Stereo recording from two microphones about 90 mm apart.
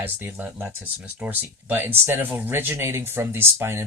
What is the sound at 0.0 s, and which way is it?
Speech, 25° right (ahead or behind).